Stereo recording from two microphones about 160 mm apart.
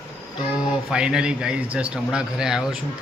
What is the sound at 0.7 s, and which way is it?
A man's voice, 5° right (ahead or behind).